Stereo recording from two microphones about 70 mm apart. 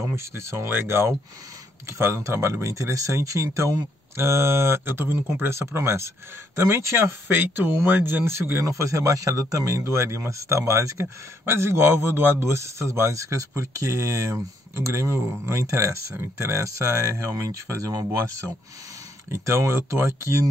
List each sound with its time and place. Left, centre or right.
0.1 s speech: right
8.6 s speech: right